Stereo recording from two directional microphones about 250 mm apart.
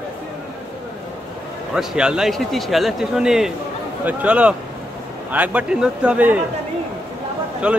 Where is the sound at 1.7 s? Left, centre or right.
Centre.